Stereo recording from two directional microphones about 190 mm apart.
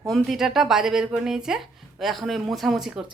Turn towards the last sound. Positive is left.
turn(degrees=0)  # may be behind; listen again after turning